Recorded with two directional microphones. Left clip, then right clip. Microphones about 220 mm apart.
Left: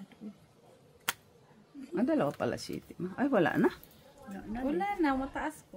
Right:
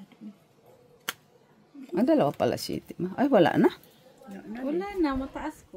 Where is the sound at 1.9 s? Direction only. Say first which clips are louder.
Right 7 dB; 50° right (ahead or behind).